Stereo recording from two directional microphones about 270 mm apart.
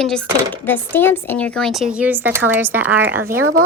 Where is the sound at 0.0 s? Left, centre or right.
Centre.